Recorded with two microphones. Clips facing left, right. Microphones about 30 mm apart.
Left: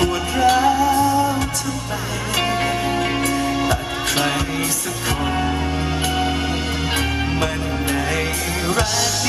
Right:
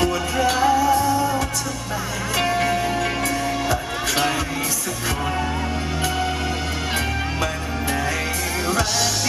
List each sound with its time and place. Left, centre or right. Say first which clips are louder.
0.0 s music: left 3 dB; centre